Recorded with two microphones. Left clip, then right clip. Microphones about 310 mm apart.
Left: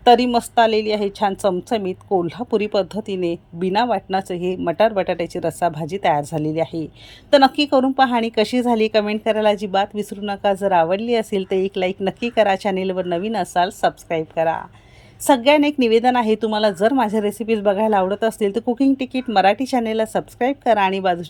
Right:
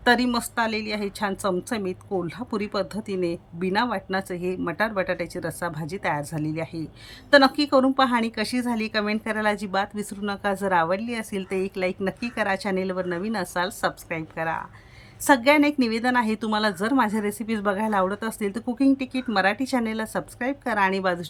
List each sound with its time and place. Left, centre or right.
0.0 s speech: centre
15.3 s speech: centre